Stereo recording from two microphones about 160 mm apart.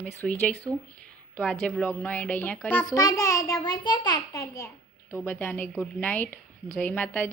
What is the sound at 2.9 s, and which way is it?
A child's voice, 20° left (ahead or behind).